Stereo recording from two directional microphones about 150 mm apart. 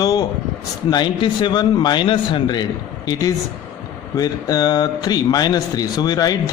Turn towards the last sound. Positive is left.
turn(degrees=25)  # may be behind; listen again after turning